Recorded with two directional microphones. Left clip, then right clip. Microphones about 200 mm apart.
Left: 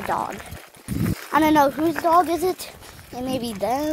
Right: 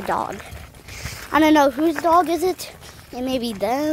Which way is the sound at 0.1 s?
20° right (ahead or behind).